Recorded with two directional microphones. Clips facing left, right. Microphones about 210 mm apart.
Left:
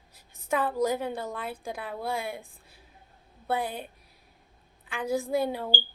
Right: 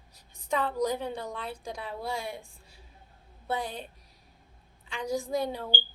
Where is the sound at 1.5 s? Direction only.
55° left (ahead or behind).